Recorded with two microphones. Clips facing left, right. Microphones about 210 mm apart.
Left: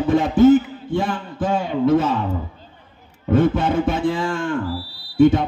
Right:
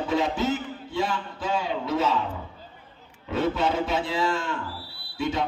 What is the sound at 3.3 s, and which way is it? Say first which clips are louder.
Speech: left 7 dB; 50° left (ahead or behind).